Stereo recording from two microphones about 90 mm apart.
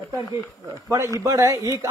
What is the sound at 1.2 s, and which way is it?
Speech, 35° right (ahead or behind).